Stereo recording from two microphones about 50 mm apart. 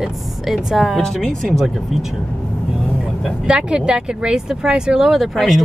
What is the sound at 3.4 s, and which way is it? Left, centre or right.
Speech, centre.